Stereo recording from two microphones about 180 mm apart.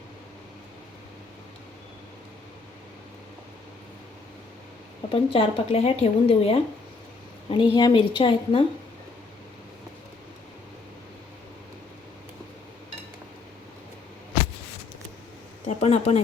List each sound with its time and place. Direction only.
5.0 s a woman's voice: 30° left (ahead or behind)
15.6 s speech: 35° left (ahead or behind)